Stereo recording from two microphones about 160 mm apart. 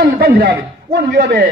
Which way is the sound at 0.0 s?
65° right (ahead or behind).